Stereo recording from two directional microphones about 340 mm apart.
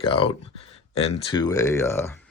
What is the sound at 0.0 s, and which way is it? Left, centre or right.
Speech, centre.